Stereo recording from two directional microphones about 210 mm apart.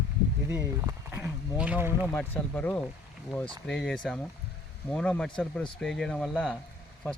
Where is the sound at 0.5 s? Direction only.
10° right (ahead or behind).